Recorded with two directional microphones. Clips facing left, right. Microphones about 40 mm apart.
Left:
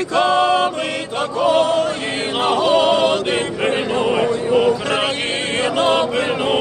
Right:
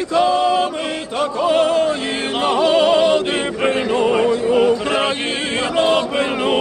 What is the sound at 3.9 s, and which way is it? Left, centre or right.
Music, centre.